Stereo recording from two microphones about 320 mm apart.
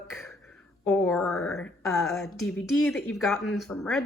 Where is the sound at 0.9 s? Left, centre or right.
Centre.